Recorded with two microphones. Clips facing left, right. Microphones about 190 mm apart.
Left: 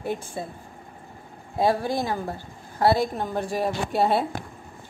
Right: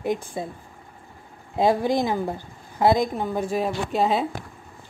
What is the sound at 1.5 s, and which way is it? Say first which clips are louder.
A woman's voice: right 3 dB; 20° right (ahead or behind).